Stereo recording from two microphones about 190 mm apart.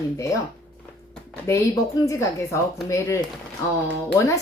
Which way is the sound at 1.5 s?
15° left (ahead or behind).